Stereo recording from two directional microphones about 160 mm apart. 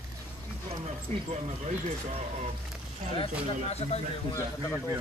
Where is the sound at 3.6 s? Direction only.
40° left (ahead or behind).